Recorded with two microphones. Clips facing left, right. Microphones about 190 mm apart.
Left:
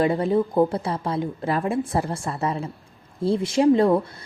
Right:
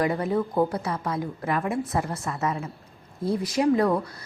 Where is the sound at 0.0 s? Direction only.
25° left (ahead or behind).